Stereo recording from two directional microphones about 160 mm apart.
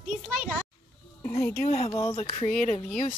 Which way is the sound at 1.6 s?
45° left (ahead or behind).